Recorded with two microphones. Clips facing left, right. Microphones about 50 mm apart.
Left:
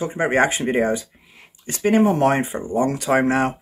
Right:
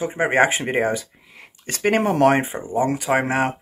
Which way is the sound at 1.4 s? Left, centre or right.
Right.